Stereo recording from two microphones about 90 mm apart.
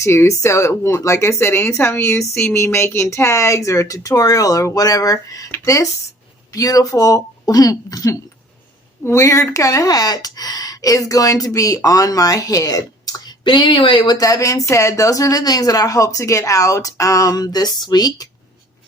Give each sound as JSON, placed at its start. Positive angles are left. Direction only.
{"t": 0.0, "sound": "speech", "side_deg": 30}
{"t": 13.4, "sound": "speech", "side_deg": 65}
{"t": 14.2, "sound": "speech", "side_deg": 40}